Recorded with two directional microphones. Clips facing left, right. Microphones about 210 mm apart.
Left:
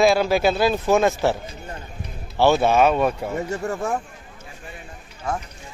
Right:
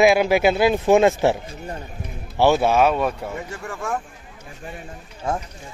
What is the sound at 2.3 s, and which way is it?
Speech, 10° right (ahead or behind).